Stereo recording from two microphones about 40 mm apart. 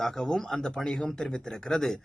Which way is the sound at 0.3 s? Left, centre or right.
Centre.